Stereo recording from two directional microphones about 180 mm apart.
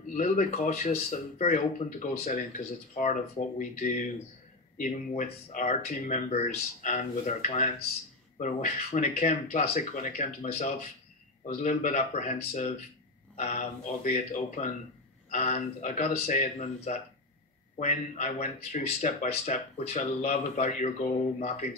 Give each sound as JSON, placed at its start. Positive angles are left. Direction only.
{"t": 0.1, "sound": "speech", "side_deg": 40}